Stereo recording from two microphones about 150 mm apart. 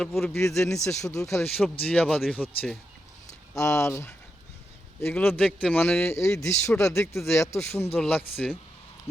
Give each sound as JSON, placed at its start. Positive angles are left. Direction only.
{"t": 0.0, "sound": "speech", "side_deg": 0}
{"t": 0.3, "sound": "speech", "side_deg": 20}
{"t": 1.4, "sound": "a man's voice", "side_deg": 5}
{"t": 3.5, "sound": "a man's voice", "side_deg": 20}